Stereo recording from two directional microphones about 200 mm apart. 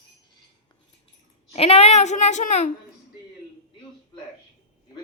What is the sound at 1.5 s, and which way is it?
A child's voice, 30° left (ahead or behind).